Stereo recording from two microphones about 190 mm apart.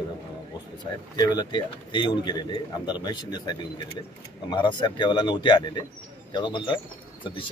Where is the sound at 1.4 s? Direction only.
25° left (ahead or behind).